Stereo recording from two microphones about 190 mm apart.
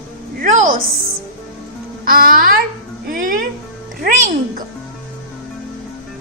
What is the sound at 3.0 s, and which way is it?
Music, 45° right (ahead or behind).